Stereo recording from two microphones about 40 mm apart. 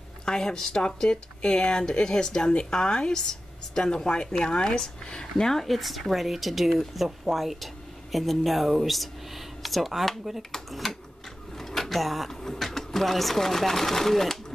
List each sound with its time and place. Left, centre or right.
0.2 s speech: centre
5.7 s speech: centre
11.5 s a sound: centre
12.5 s speech: centre